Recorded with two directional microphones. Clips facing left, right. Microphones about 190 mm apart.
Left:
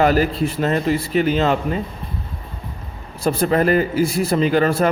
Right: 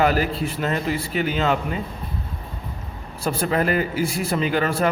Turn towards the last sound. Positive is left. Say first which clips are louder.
# left 5 dB
turn(degrees=40)  # may be behind; listen again after turning